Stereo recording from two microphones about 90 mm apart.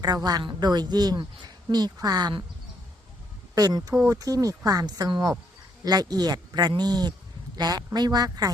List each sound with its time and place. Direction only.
0.0 s speech: 45° right (ahead or behind)
3.5 s a man's voice: 45° right (ahead or behind)